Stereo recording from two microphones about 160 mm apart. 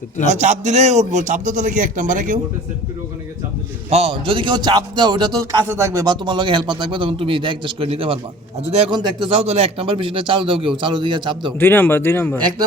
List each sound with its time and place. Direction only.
0.3 s a man's voice: 45° right (ahead or behind)
3.8 s a man's voice: 40° right (ahead or behind)
11.6 s speech: 15° left (ahead or behind)